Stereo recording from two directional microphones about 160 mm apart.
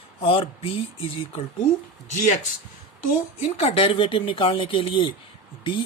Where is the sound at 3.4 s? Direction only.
35° left (ahead or behind).